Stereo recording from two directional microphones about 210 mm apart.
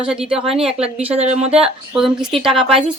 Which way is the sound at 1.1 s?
30° right (ahead or behind).